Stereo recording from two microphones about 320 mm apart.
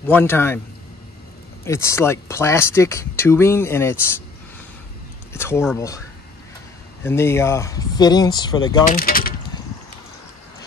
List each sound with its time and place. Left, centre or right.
0.0 s speech: centre
1.6 s speech: centre
5.3 s speech: centre
7.1 s speech: centre
8.9 s speech: left